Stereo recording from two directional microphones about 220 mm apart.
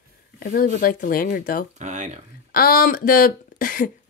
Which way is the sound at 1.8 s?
35° right (ahead or behind).